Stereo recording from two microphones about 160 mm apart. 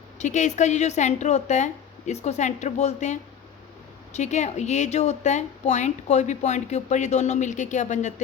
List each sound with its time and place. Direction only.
0.2 s a woman's voice: 50° left (ahead or behind)